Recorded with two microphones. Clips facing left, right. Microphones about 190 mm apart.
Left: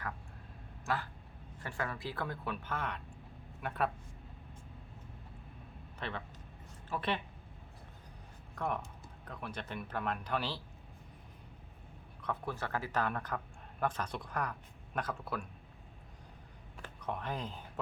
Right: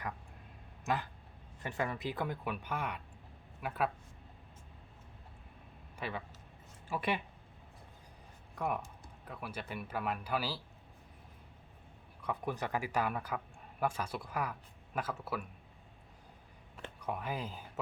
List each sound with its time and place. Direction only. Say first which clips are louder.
1.6 s speech: right 3 dB; 20° right (ahead or behind); by 3.9 s 5° right (ahead or behind)
6.0 s speech: right 1 dB; 10° right (ahead or behind)
8.5 s speech: right 1 dB; 5° right (ahead or behind)
12.2 s speech: right 2 dB; 15° right (ahead or behind)
17.0 s speech: even; 5° right (ahead or behind)